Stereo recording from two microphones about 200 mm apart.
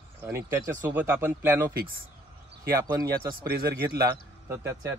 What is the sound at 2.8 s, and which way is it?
Speech, 20° right (ahead or behind).